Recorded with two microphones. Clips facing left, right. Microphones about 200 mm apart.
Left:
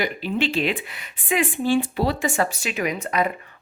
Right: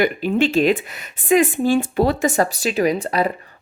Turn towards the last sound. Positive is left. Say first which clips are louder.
# right 3 dB
turn(degrees=-35)  # may be behind; listen again after turning